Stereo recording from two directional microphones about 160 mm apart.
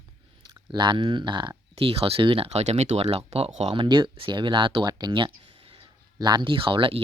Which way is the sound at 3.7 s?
30° right (ahead or behind).